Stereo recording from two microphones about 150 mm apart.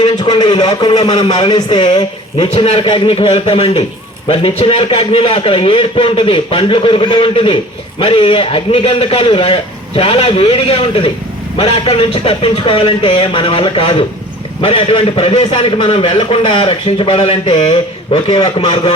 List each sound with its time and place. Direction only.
0.0 s a man's voice: 25° left (ahead or behind)